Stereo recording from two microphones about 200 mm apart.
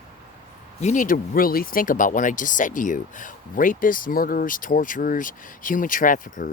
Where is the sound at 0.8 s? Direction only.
35° left (ahead or behind).